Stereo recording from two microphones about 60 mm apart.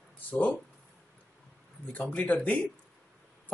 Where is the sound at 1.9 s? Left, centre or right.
Left.